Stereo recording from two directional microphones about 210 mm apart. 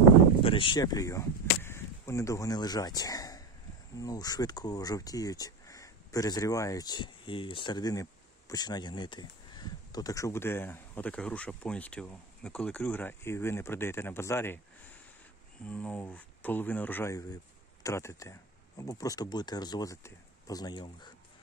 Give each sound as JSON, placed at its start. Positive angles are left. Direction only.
{"t": 0.4, "sound": "speech", "side_deg": 25}
{"t": 15.6, "sound": "speech", "side_deg": 5}